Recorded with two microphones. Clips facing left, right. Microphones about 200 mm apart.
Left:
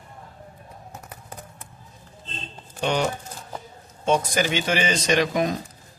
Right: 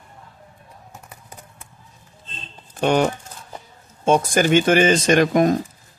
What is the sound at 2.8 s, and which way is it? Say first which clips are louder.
Speech: right 6 dB; 50° right (ahead or behind).